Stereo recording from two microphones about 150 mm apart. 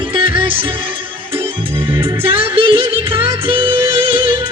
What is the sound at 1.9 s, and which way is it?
Music, 35° right (ahead or behind).